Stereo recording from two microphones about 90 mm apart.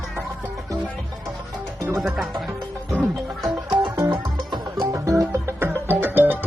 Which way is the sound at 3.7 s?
55° right (ahead or behind).